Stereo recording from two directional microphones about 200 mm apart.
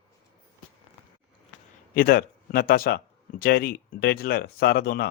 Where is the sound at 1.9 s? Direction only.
45° left (ahead or behind).